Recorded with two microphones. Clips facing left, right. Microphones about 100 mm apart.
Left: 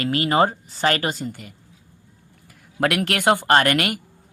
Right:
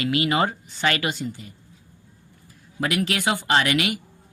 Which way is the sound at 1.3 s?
65° left (ahead or behind).